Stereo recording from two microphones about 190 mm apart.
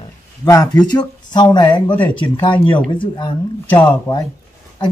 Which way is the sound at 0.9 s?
20° left (ahead or behind).